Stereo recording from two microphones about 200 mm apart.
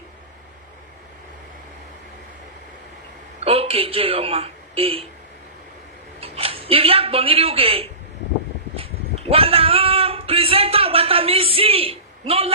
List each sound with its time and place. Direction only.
3.4 s speech: 30° right (ahead or behind)
6.1 s a man's voice: 30° right (ahead or behind)
9.3 s a sound: 30° right (ahead or behind)